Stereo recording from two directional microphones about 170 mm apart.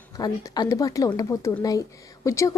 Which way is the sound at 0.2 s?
25° left (ahead or behind).